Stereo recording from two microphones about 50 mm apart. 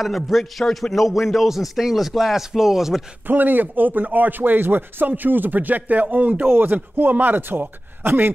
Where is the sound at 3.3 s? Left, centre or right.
Right.